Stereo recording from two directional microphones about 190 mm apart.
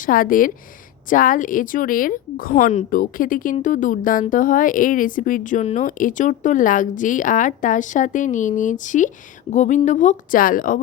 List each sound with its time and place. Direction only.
0.0 s a woman's voice: 45° left (ahead or behind)